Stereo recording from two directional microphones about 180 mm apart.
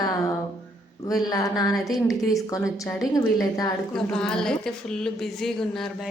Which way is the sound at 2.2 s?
20° left (ahead or behind).